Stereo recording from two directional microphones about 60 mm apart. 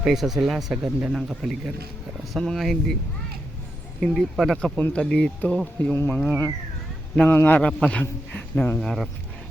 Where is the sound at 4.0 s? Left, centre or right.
Centre.